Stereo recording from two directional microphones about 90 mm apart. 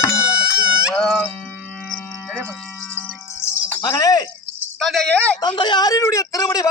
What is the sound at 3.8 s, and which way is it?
Music, 45° left (ahead or behind).